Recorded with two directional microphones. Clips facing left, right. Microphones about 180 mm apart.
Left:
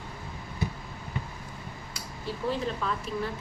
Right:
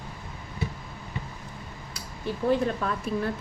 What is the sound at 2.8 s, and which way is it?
Speech, 50° right (ahead or behind).